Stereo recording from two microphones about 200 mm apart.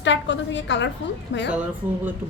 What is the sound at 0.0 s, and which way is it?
Speech, 65° left (ahead or behind).